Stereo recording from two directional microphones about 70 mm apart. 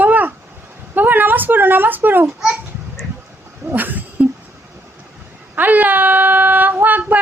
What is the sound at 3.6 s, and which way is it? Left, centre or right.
Speech, right.